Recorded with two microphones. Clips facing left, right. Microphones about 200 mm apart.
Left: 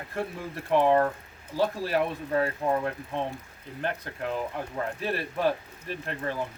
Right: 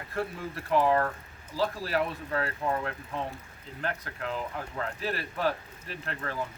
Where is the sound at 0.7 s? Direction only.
25° left (ahead or behind).